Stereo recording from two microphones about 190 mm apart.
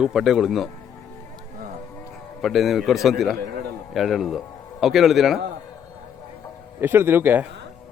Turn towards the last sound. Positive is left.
turn(degrees=-10)  # may be behind; listen again after turning